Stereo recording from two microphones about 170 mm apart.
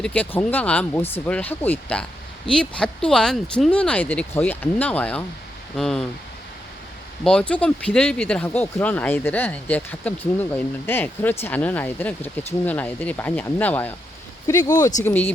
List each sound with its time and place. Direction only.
0.0 s speech: 10° left (ahead or behind)
7.3 s speech: 5° left (ahead or behind)
15.0 s speech: 10° left (ahead or behind)